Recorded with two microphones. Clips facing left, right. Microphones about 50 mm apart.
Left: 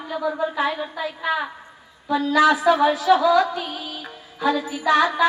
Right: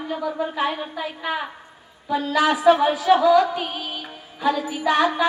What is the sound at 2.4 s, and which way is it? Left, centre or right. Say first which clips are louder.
Speech: even; right.